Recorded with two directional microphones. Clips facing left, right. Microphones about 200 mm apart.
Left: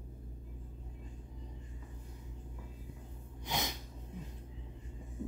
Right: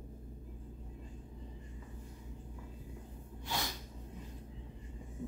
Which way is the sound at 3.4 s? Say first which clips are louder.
Left 2 dB; 20° left (ahead or behind).